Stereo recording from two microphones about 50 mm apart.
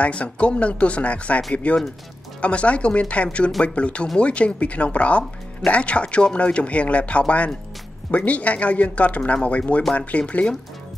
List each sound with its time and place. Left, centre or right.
0.0 s speech: left